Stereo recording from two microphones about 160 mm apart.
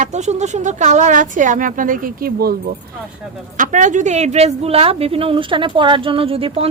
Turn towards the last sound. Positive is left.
turn(degrees=-35)  # may be behind; listen again after turning